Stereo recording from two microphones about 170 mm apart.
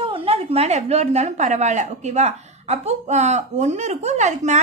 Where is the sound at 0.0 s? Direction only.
30° right (ahead or behind).